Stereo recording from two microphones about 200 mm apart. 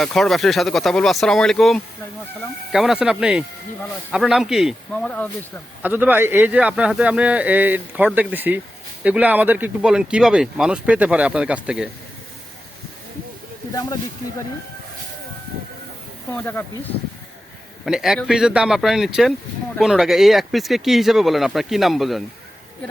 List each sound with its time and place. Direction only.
0.0 s speech: centre (ahead or behind)
5.8 s speech: 10° right (ahead or behind)
13.7 s speech: 15° left (ahead or behind)
16.3 s speech: 10° left (ahead or behind)
17.8 s speech: centre (ahead or behind)